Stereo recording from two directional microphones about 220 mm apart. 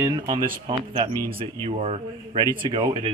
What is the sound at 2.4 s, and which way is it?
Speech, 15° right (ahead or behind).